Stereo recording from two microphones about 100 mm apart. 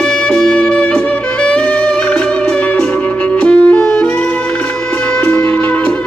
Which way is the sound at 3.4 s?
10° left (ahead or behind).